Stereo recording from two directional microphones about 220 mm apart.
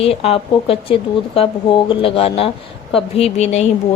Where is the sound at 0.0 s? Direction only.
25° left (ahead or behind).